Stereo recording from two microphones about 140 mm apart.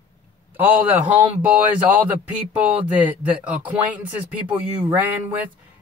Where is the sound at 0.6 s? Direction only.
10° right (ahead or behind).